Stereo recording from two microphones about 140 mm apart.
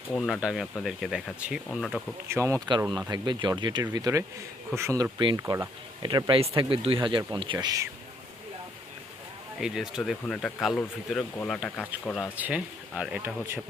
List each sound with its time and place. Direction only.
0.1 s speech: centre (ahead or behind)
2.2 s speech: 20° right (ahead or behind)
3.1 s speech: 35° right (ahead or behind)
9.6 s speech: 5° right (ahead or behind)
10.0 s speech: 5° left (ahead or behind)
12.4 s speech: 10° right (ahead or behind)